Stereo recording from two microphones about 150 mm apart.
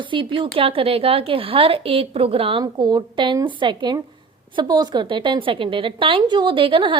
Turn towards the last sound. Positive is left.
turn(degrees=-35)  # may be behind; listen again after turning